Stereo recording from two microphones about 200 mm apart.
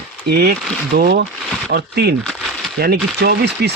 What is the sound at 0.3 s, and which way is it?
Speech, 50° right (ahead or behind).